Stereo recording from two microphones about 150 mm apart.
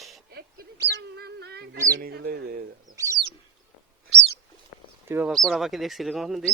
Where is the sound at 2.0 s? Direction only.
90° right; by 3.0 s 75° right (ahead or behind).